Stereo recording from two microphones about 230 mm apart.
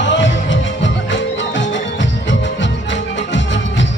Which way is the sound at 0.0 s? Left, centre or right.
Left.